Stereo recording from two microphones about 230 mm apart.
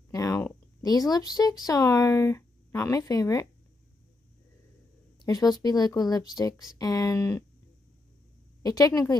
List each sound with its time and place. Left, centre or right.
0.1 s a sound: centre
1.7 s speech: centre
5.2 s speech: centre
8.6 s speech: centre